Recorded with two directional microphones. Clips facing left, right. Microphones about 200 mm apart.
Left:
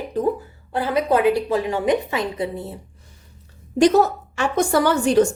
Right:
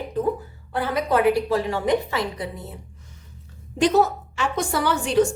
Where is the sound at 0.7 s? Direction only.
25° left (ahead or behind).